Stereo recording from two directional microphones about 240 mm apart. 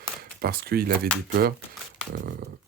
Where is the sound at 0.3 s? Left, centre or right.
Right.